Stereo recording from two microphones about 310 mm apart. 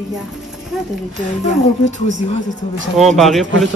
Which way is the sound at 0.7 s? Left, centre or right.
Centre.